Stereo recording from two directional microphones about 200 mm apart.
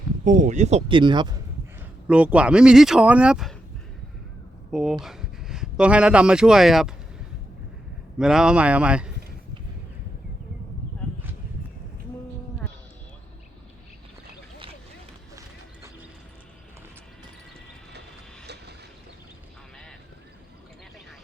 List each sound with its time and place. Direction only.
0.3 s speech: 40° right (ahead or behind); by 1.4 s 20° right (ahead or behind)
2.0 s speech: 5° right (ahead or behind)
4.7 s speech: centre (ahead or behind)
8.2 s speech: 5° right (ahead or behind)
18.4 s a sound: 55° right (ahead or behind)